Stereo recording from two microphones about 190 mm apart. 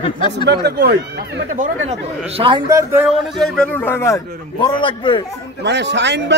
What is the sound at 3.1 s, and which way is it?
A man's voice, centre (ahead or behind).